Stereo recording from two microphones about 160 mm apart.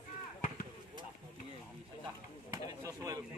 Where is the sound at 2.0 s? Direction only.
25° right (ahead or behind).